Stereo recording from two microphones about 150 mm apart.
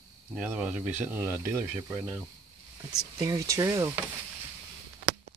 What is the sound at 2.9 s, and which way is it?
Speech, 25° right (ahead or behind).